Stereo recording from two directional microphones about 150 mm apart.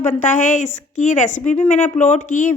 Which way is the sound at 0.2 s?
55° left (ahead or behind).